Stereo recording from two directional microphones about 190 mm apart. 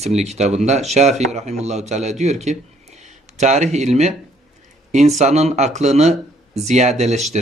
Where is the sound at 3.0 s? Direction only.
40° right (ahead or behind).